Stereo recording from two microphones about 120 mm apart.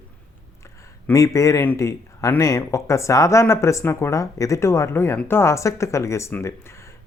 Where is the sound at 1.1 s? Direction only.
25° left (ahead or behind).